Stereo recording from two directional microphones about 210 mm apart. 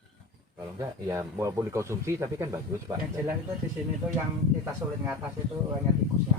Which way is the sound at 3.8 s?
Centre (ahead or behind).